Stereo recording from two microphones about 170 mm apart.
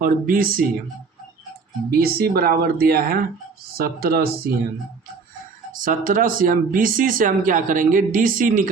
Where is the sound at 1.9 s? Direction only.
65° right (ahead or behind).